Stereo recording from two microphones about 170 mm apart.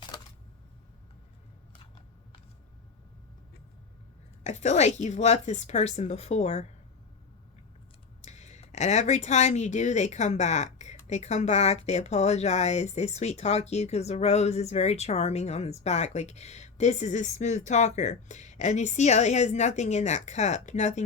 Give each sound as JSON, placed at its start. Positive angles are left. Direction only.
{"t": 4.4, "sound": "speech", "side_deg": 40}
{"t": 8.2, "sound": "speech", "side_deg": 40}